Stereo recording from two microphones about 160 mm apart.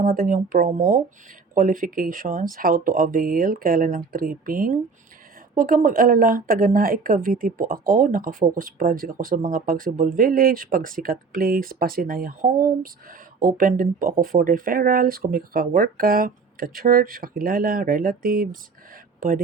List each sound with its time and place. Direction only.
0.0 s speech: 60° right (ahead or behind)